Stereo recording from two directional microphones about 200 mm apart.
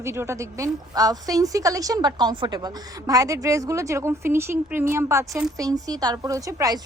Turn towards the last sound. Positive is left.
turn(degrees=-15)  # may be behind; listen again after turning